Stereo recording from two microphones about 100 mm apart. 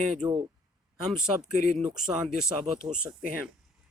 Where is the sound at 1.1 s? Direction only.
5° right (ahead or behind).